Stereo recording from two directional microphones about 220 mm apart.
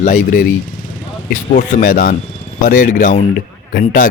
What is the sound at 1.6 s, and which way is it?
Speech, 40° left (ahead or behind).